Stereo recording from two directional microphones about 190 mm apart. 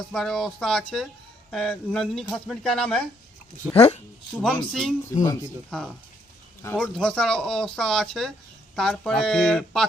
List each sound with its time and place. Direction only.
0.0 s speech: centre (ahead or behind)
3.8 s speech: 30° left (ahead or behind)
4.4 s speech: centre (ahead or behind)